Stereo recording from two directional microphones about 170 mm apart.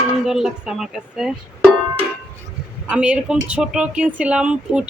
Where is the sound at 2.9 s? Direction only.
5° right (ahead or behind).